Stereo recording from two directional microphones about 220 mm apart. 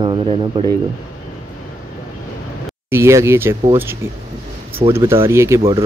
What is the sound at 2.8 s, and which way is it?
Speech, 10° right (ahead or behind).